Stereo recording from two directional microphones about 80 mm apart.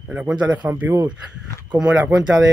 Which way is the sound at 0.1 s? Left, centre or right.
Centre.